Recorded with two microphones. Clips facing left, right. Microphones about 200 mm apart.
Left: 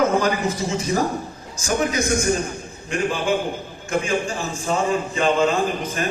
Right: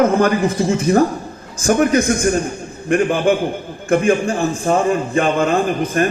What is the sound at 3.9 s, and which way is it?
A man's voice, 55° right (ahead or behind).